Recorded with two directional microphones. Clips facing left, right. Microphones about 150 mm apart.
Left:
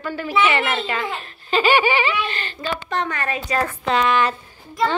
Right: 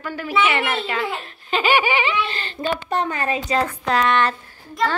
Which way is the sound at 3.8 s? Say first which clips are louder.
Left 2 dB; centre (ahead or behind).